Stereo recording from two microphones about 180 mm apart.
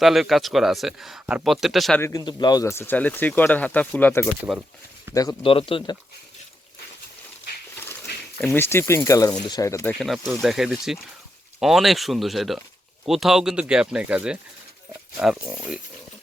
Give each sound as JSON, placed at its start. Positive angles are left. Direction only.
{"t": 0.0, "sound": "speech", "side_deg": 0}
{"t": 2.0, "sound": "speech", "side_deg": 15}
{"t": 5.4, "sound": "speech", "side_deg": 30}
{"t": 8.5, "sound": "speech", "side_deg": 15}
{"t": 10.0, "sound": "speech", "side_deg": 0}